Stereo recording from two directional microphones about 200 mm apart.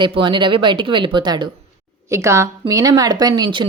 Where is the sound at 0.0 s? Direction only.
25° right (ahead or behind).